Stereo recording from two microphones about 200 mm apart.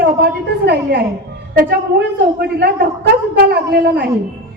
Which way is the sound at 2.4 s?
55° right (ahead or behind).